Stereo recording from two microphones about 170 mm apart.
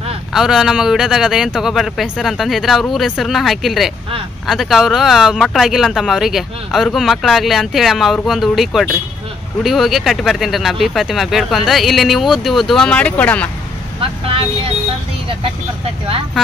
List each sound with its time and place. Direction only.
0.3 s speech: 5° right (ahead or behind)